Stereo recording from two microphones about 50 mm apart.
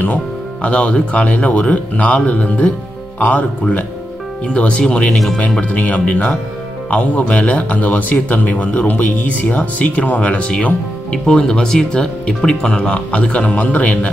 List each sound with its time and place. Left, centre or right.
0.6 s speech: left
5.6 s speech: left